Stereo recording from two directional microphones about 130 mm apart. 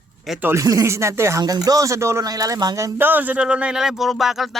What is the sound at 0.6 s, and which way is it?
Speech, 25° right (ahead or behind).